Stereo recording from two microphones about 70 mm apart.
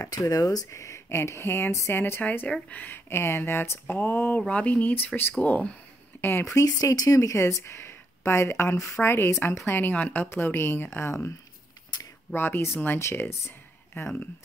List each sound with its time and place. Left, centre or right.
0.0 s speech: left
0.7 s speech: left
2.4 s speech: centre
4.5 s speech: centre
6.4 s speech: left
12.4 s speech: left